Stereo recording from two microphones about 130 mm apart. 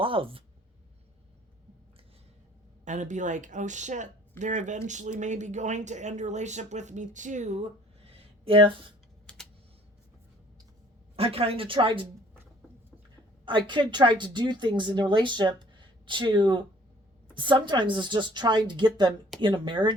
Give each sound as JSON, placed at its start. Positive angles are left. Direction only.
{"t": 0.0, "sound": "speech", "side_deg": -45}
{"t": 2.8, "sound": "speech", "side_deg": -70}
{"t": 11.2, "sound": "speech", "side_deg": -50}
{"t": 13.4, "sound": "a woman's voice", "side_deg": -40}